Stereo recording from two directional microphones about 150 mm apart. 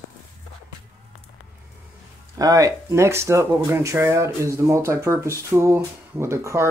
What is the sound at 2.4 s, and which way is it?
Speech, 25° right (ahead or behind).